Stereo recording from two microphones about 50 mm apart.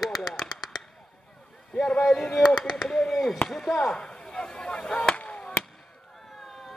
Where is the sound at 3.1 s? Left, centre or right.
Centre.